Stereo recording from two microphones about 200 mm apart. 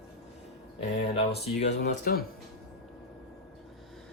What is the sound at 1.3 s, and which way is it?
Speech, 55° left (ahead or behind).